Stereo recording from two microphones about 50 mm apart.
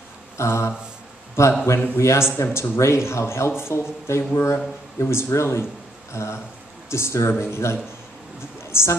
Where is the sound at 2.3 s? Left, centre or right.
Left.